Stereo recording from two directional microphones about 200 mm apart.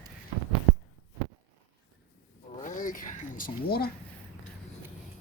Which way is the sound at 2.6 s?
40° left (ahead or behind).